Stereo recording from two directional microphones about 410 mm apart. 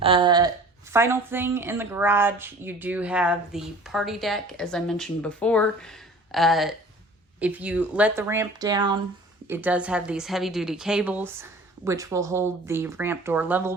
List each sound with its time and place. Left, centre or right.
0.0 s speech: centre